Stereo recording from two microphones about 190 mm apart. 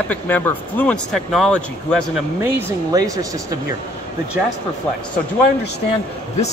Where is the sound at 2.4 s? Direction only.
20° right (ahead or behind).